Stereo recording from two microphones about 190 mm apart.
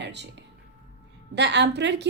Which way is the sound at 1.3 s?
65° right (ahead or behind).